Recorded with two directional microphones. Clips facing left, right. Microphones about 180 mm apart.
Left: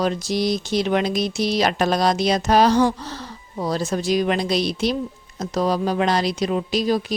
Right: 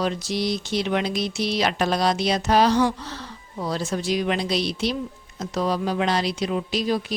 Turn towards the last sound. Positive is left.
turn(degrees=40)  # may be behind; listen again after turning